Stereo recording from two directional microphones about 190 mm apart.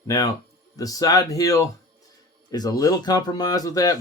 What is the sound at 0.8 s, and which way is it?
Speech, 20° left (ahead or behind).